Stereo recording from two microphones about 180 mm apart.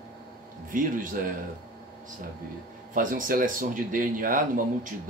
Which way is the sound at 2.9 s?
50° right (ahead or behind).